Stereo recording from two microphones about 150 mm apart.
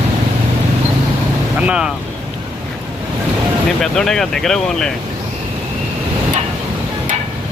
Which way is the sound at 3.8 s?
5° left (ahead or behind).